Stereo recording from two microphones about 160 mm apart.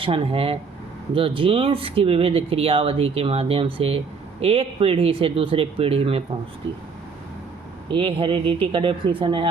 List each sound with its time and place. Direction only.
0.0 s speech: 35° right (ahead or behind)
7.9 s speech: 35° right (ahead or behind)